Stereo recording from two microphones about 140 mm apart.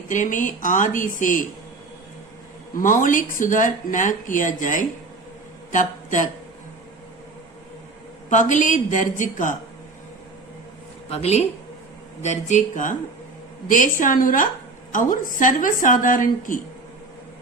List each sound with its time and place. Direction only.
0.1 s speech: 65° left (ahead or behind)
2.7 s speech: 70° left (ahead or behind)
8.3 s a woman's voice: 60° left (ahead or behind)
11.1 s a woman's voice: 50° left (ahead or behind); by 16.6 s 75° left (ahead or behind)